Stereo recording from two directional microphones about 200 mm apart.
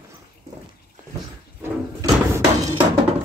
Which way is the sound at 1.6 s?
15° right (ahead or behind).